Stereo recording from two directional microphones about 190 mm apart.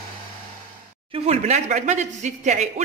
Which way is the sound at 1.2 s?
35° right (ahead or behind).